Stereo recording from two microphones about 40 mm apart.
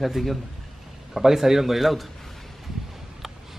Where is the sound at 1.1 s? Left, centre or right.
Centre.